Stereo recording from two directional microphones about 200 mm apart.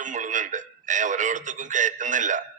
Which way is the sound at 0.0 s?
40° right (ahead or behind).